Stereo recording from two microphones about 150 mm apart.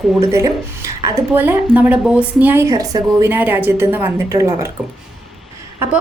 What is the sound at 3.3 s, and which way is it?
A woman's voice, 15° right (ahead or behind).